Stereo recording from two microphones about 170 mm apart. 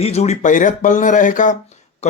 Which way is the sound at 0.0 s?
40° left (ahead or behind).